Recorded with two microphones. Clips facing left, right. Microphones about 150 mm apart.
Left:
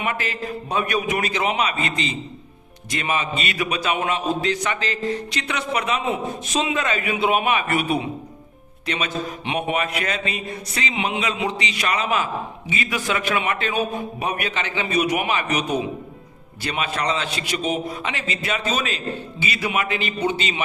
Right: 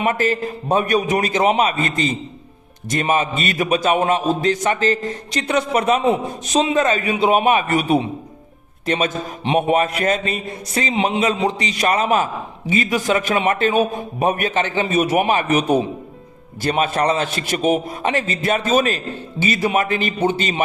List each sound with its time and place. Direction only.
0.0 s a man's voice: 45° right (ahead or behind)